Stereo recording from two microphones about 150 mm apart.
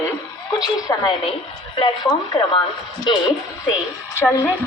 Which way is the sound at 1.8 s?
30° left (ahead or behind).